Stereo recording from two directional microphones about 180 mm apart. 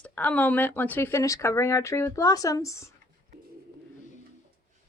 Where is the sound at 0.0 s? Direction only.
10° left (ahead or behind).